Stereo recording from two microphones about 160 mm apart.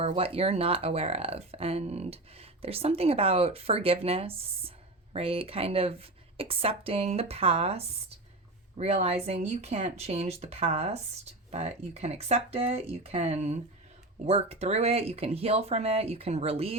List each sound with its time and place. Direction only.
0.0 s speech: 35° right (ahead or behind)